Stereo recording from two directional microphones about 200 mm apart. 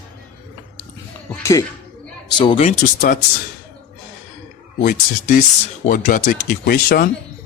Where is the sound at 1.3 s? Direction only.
15° left (ahead or behind); by 3.2 s 35° left (ahead or behind).